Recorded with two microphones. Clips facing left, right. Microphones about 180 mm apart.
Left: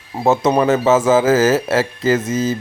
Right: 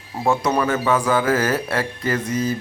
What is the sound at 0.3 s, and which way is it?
Speech, 20° left (ahead or behind).